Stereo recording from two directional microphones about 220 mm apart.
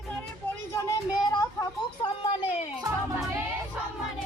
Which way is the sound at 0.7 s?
15° left (ahead or behind).